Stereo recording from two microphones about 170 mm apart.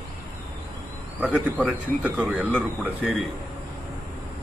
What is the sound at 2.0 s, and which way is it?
Speech, 5° right (ahead or behind).